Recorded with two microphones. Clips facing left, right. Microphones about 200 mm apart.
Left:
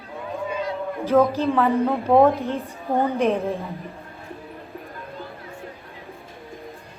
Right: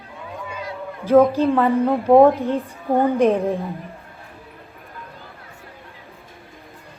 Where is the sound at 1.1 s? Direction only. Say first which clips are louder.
Right 4 dB; 15° right (ahead or behind).